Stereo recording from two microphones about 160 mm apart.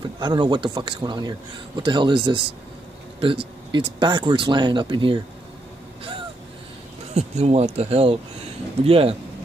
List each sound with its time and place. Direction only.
0.2 s speech: 30° right (ahead or behind)
7.2 s speech: 45° right (ahead or behind)